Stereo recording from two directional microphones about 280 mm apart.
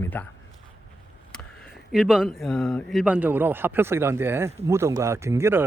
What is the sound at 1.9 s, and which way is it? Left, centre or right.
A man's voice, centre.